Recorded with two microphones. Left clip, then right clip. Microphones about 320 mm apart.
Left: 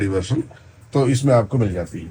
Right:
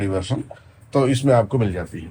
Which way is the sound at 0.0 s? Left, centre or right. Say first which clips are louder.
Left 2 dB; centre.